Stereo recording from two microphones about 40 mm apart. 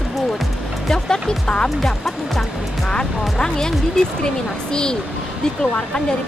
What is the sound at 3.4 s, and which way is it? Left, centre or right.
Speech, centre.